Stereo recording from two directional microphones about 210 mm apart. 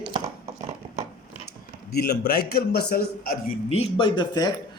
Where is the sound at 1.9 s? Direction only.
45° left (ahead or behind).